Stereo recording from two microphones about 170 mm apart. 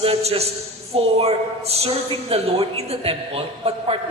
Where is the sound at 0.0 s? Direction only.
35° right (ahead or behind).